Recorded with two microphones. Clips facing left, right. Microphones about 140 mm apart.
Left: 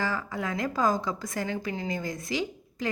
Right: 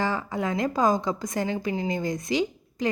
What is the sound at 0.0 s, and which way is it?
A woman's voice, 25° right (ahead or behind).